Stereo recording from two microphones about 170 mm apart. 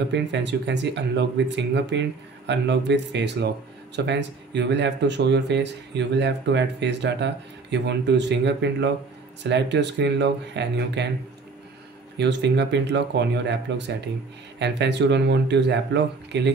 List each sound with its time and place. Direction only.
0.1 s speech: 90° right
12.2 s speech: 90° right